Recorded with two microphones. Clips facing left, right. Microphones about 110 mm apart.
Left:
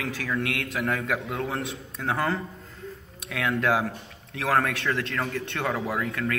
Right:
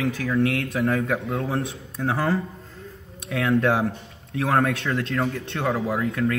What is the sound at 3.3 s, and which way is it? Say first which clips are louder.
A man's voice: right 4 dB; 25° right (ahead or behind).